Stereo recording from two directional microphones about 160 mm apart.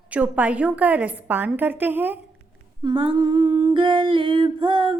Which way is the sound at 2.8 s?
30° right (ahead or behind).